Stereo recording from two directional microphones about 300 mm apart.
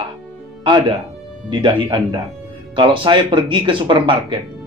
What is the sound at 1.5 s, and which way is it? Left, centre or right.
Speech, centre.